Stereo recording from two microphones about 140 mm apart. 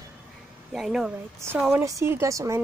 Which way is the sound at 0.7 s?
Centre (ahead or behind).